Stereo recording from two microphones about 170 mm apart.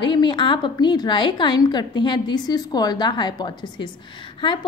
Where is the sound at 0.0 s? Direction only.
30° left (ahead or behind).